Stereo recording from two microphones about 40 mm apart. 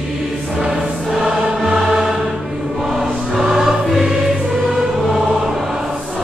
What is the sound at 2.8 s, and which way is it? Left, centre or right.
Choir, centre.